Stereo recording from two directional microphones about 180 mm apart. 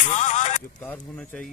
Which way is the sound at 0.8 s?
10° left (ahead or behind).